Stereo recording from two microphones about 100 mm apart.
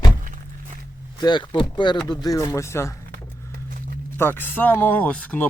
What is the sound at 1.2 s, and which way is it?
Speech, 50° left (ahead or behind).